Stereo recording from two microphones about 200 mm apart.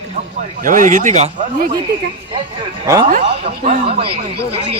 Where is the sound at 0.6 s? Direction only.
40° right (ahead or behind).